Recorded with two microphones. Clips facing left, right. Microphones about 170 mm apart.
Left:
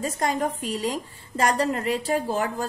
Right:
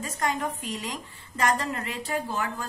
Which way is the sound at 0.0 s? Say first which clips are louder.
Left 4 dB; 35° left (ahead or behind).